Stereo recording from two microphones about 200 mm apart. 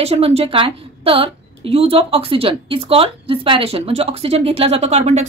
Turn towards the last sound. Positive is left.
turn(degrees=-35)  # may be behind; listen again after turning